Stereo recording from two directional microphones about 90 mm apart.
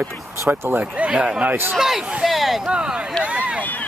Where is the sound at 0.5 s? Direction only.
20° right (ahead or behind).